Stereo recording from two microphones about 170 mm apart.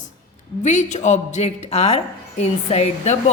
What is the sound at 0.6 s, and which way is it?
A woman's voice, 45° left (ahead or behind).